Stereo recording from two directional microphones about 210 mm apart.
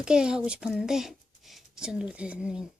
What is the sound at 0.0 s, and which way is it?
Speech, 5° right (ahead or behind).